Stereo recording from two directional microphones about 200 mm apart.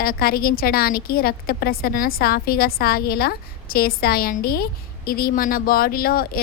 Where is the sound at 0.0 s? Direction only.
50° left (ahead or behind).